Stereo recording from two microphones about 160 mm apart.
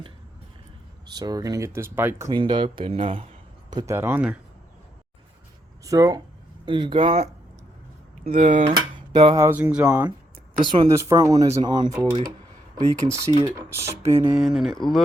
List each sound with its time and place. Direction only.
1.1 s speech: 25° right (ahead or behind)
2.3 s speech: 30° right (ahead or behind)
3.9 s speech: 15° right (ahead or behind)
5.8 s speech: 20° right (ahead or behind); by 7.3 s 35° right (ahead or behind)
8.3 s speech: 45° right (ahead or behind)
8.7 s dishes: 25° right (ahead or behind)
9.5 s speech: 10° right (ahead or behind)
10.6 s speech: 30° right (ahead or behind)
14.3 s speech: centre (ahead or behind)